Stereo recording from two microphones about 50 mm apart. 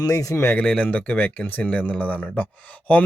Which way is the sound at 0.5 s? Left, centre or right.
Left.